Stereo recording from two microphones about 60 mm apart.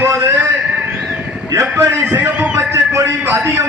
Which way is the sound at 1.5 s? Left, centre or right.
Right.